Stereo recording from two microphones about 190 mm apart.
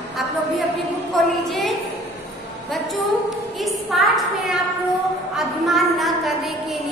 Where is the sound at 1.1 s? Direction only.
Centre (ahead or behind).